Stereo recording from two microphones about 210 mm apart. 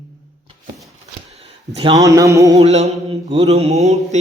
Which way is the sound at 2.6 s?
30° right (ahead or behind).